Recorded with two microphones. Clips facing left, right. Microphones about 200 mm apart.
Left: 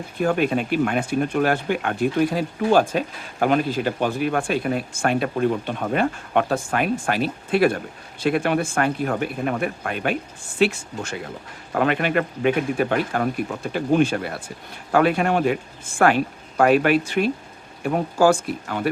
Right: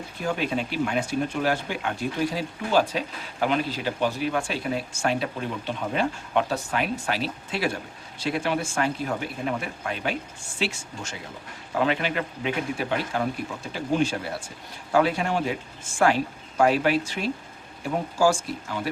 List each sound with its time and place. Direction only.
0.2 s speech: 55° left (ahead or behind)